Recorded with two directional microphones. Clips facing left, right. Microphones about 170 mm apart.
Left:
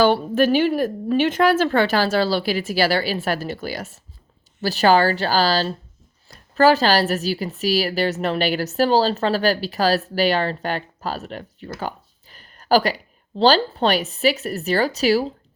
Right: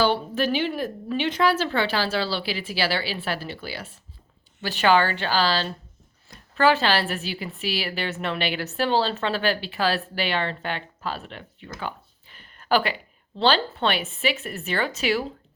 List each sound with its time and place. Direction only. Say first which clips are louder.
0.0 s a woman's voice: left 6 dB; 50° left (ahead or behind)